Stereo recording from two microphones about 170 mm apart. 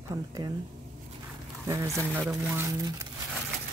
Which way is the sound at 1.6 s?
20° right (ahead or behind).